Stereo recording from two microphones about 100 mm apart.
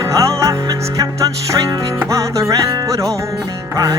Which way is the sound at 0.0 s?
35° right (ahead or behind).